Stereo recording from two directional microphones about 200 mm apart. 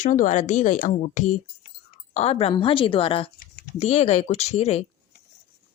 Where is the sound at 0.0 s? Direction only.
40° left (ahead or behind).